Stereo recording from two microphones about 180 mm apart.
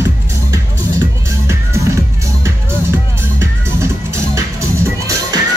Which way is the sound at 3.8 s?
15° right (ahead or behind).